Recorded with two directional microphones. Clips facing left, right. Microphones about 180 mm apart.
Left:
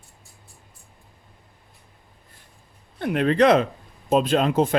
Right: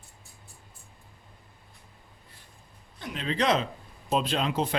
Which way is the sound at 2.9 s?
60° left (ahead or behind).